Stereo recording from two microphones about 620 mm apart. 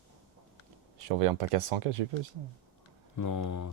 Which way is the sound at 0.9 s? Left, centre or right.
Right.